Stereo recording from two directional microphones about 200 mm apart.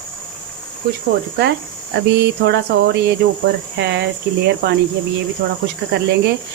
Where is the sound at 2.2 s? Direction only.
55° right (ahead or behind).